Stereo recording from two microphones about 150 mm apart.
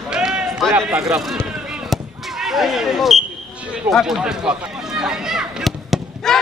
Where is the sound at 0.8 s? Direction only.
5° right (ahead or behind).